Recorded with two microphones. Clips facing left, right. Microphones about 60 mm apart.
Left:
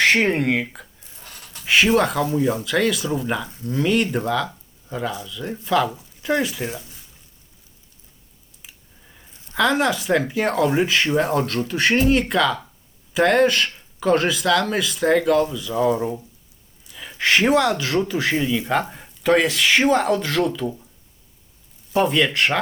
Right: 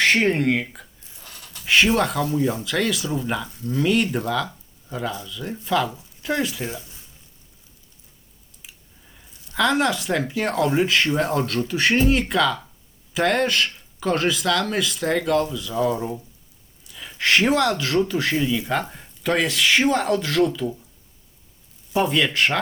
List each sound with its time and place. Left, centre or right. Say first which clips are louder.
0.3 s speech: even; centre
1.6 s a sound: even; centre
2.0 s speech: left 2 dB; centre
9.6 s speech: left 1 dB; centre
15.7 s speech: left 3 dB; left
17.2 s speech: left 2 dB; centre
18.3 s speech: left 1 dB; centre
18.7 s speech: left 3 dB; centre
21.9 s speech: left 2 dB; centre